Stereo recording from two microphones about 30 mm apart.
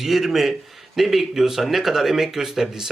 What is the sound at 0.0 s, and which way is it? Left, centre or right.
Speech, centre.